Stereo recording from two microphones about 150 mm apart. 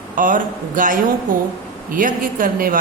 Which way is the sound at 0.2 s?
60° right (ahead or behind).